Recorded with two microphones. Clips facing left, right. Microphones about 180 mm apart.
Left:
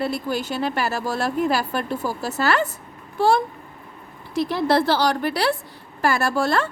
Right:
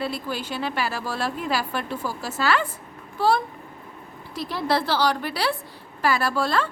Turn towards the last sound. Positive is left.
turn(degrees=45)  # may be behind; listen again after turning